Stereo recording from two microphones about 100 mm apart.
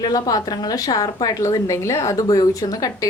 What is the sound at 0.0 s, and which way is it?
A woman's voice, 40° left (ahead or behind).